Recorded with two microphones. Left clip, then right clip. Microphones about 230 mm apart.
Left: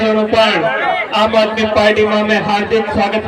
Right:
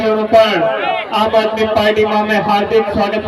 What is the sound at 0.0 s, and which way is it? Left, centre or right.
A man's voice, right.